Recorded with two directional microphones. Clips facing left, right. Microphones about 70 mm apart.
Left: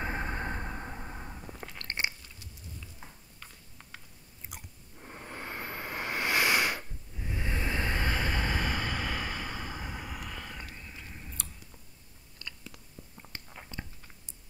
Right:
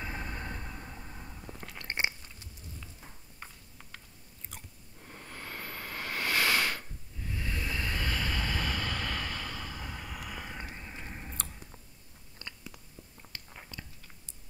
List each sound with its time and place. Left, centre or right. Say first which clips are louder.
0.0 s vehicle: left 5 dB; left
1.4 s biting: left 1 dB; centre
1.8 s biting: right 2 dB; centre
4.5 s a sound: left 2 dB; centre
10.0 s vehicle: left 1 dB; centre
10.4 s chewing: right 2 dB; right
12.4 s chewing: left 1 dB; right
13.7 s chewing: left 3 dB; left